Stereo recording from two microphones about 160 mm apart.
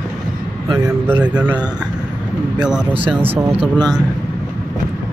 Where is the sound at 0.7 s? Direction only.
15° right (ahead or behind).